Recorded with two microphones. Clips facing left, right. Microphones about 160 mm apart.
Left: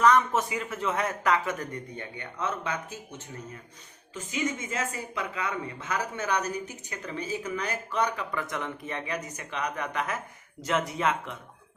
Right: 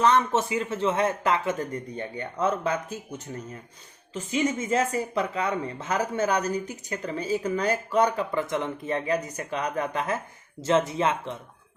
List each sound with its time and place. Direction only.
0.0 s speech: 25° right (ahead or behind)
4.1 s speech: 35° right (ahead or behind)